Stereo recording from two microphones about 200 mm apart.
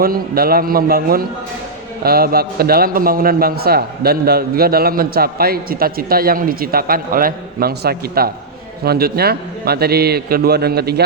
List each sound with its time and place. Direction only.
0.0 s a man's voice: 50° right (ahead or behind)